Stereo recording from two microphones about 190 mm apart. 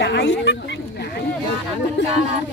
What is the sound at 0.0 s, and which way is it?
Speech, 70° left (ahead or behind).